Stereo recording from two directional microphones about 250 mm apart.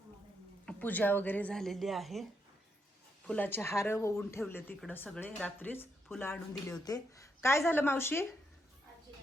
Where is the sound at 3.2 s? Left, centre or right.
Centre.